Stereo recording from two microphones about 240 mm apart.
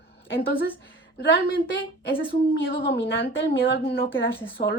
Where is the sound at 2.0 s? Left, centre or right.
Left.